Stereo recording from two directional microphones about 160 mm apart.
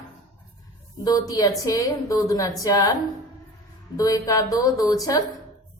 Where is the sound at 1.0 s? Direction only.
25° left (ahead or behind).